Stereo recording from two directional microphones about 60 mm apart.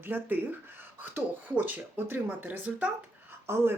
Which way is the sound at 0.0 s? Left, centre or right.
Right.